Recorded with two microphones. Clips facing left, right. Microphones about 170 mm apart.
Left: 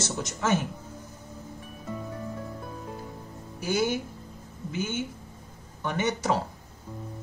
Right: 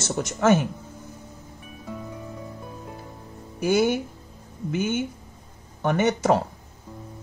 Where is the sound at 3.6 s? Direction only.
55° right (ahead or behind).